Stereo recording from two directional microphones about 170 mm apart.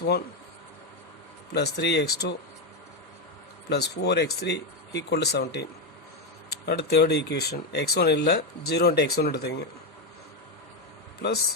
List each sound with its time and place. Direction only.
1.5 s speech: 75° left (ahead or behind)
3.7 s speech: 75° left (ahead or behind)
6.7 s speech: 70° left (ahead or behind)